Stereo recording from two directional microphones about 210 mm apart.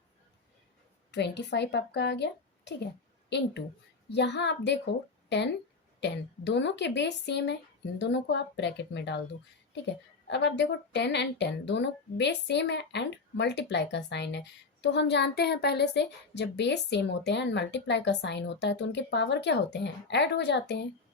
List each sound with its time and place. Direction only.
1.1 s a woman's voice: 55° left (ahead or behind)